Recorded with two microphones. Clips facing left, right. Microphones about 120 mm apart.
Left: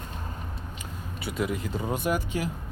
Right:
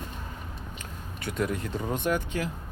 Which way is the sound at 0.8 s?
10° left (ahead or behind).